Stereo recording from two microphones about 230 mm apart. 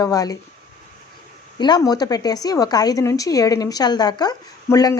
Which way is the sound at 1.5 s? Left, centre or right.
Centre.